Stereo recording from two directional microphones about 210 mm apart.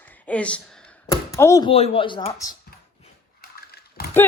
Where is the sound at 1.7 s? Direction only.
25° left (ahead or behind).